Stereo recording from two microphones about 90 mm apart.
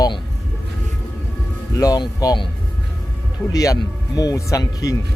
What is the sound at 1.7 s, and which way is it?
Speech, 45° left (ahead or behind).